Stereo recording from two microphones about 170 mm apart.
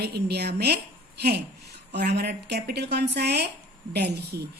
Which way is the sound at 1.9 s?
75° right (ahead or behind).